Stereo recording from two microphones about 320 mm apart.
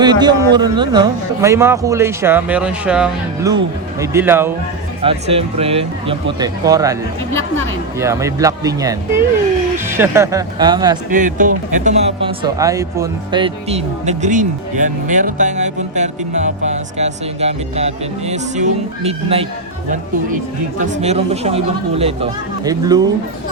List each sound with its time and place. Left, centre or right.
0.0 s a man's voice: centre
5.0 s a man's voice: centre
7.9 s a man's voice: centre
11.1 s speech: right
20.7 s speech: right